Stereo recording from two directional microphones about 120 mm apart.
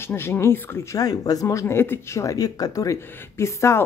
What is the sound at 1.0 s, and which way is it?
Speech, 30° left (ahead or behind).